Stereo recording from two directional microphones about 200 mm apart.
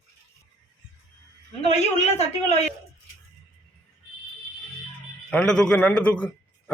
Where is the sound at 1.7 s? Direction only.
35° left (ahead or behind).